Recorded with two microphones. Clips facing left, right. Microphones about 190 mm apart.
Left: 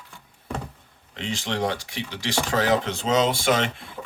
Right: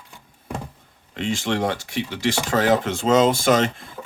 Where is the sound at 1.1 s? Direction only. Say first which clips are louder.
Right 5 dB; 50° right (ahead or behind).